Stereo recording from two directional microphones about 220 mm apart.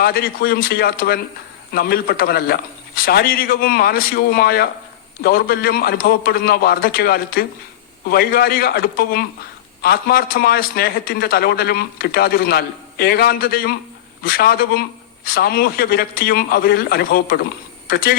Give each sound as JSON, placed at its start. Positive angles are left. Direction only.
{"t": 0.0, "sound": "a man's voice", "side_deg": 45}